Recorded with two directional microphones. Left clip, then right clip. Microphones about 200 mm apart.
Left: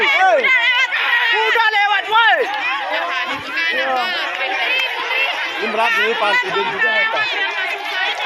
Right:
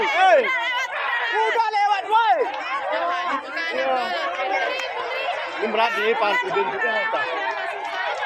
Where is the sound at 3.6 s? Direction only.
20° right (ahead or behind).